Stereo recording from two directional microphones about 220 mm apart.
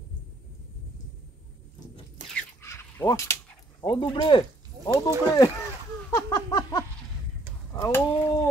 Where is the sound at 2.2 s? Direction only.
30° right (ahead or behind).